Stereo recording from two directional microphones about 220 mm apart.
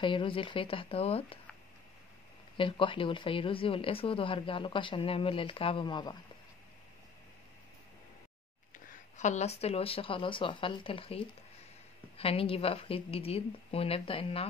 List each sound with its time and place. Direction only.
0.0 s speech: 20° left (ahead or behind)
2.5 s speech: 20° left (ahead or behind)
8.7 s speech: 35° left (ahead or behind)